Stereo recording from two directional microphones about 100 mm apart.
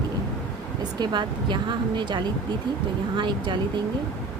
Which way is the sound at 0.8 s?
45° right (ahead or behind).